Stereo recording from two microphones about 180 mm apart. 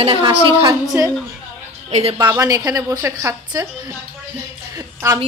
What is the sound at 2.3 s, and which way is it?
A woman's voice, 15° right (ahead or behind).